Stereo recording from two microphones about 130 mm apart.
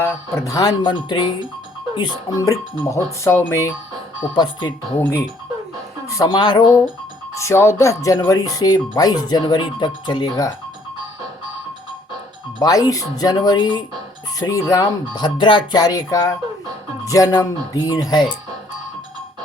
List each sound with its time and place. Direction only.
0.0 s speech: 25° left (ahead or behind)
4.9 s speech: 20° left (ahead or behind)
6.1 s speech: 30° left (ahead or behind)
7.3 s speech: 20° left (ahead or behind)
12.5 s speech: 30° left (ahead or behind)